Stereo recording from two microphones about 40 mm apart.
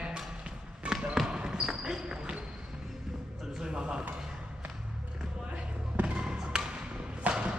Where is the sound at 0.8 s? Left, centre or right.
Right.